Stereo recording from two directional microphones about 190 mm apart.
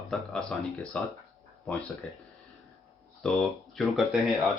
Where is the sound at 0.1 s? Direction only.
5° left (ahead or behind).